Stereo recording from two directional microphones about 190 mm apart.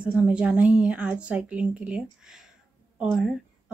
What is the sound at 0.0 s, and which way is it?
Speech, 5° right (ahead or behind).